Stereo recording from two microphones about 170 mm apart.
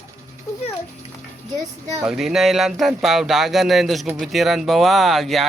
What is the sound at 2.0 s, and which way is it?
Speech, centre (ahead or behind).